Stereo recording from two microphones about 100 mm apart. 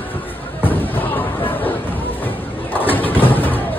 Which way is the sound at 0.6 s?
20° left (ahead or behind).